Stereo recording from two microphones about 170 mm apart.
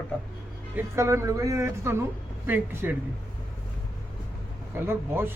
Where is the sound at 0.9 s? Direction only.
15° right (ahead or behind).